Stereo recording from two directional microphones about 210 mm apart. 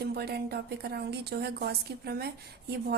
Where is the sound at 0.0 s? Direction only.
50° right (ahead or behind).